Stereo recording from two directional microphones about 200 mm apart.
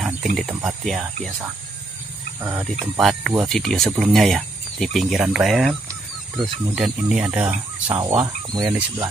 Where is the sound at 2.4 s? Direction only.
10° right (ahead or behind).